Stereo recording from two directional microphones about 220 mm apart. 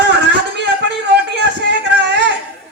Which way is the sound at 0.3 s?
50° right (ahead or behind).